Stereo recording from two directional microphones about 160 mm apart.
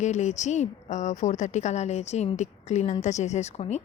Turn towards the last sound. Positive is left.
turn(degrees=45)  # may be behind; listen again after turning